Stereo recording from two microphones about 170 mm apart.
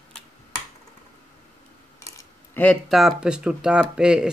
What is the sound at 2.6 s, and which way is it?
Speech, centre (ahead or behind).